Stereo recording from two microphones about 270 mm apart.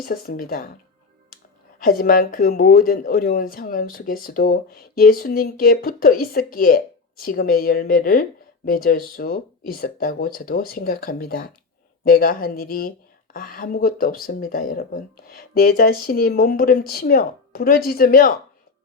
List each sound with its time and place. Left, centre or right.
0.0 s speech: left
1.8 s speech: left